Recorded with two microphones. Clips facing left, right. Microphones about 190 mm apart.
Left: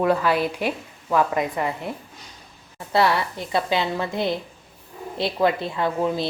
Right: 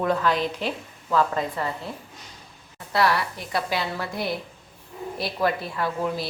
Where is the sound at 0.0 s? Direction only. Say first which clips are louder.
Left 3 dB; 10° left (ahead or behind).